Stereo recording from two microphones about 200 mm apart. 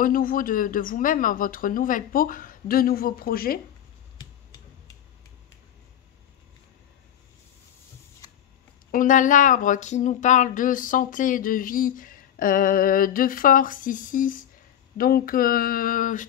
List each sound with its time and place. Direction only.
0.0 s speech: 45° left (ahead or behind)
8.9 s speech: 40° left (ahead or behind)